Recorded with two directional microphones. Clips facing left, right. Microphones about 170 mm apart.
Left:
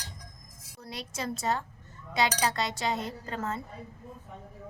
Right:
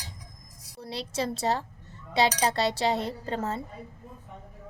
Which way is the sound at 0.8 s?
30° right (ahead or behind).